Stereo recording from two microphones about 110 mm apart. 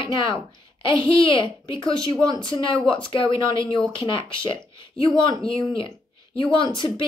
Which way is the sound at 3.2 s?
50° left (ahead or behind).